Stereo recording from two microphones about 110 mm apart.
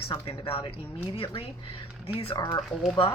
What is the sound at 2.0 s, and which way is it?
Speech, 60° left (ahead or behind).